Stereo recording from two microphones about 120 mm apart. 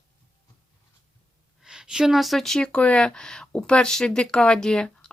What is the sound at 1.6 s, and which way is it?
Speech, 5° right (ahead or behind).